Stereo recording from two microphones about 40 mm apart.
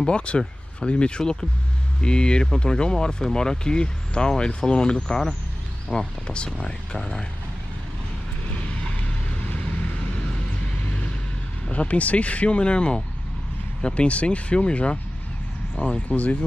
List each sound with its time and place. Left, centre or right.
0.0 s speech: left
8.5 s vehicle: left
11.7 s speech: left